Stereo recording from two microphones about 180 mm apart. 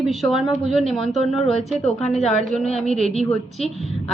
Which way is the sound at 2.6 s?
35° left (ahead or behind).